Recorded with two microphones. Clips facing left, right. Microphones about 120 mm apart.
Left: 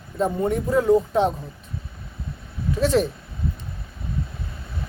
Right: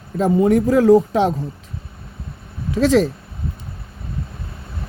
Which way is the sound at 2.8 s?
90° right.